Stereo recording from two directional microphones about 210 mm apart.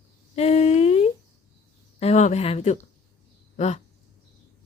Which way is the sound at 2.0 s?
30° left (ahead or behind).